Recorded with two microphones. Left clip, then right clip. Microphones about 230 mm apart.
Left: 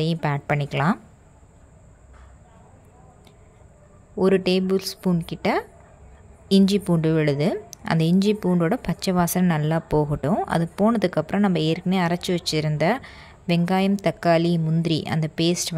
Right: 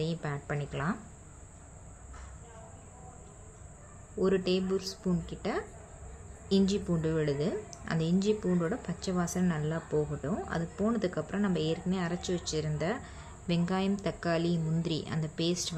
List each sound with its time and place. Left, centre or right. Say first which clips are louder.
0.0 s a woman's voice: left 11 dB; left
4.2 s a woman's voice: left 9 dB; left